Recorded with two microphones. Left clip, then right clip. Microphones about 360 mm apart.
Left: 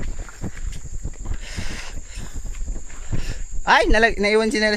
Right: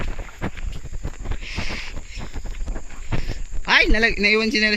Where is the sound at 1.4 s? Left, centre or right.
Left.